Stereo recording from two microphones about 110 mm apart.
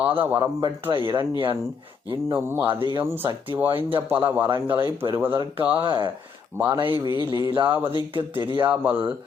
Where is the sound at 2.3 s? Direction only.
20° right (ahead or behind).